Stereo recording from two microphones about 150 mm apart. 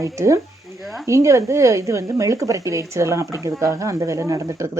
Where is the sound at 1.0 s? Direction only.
20° right (ahead or behind).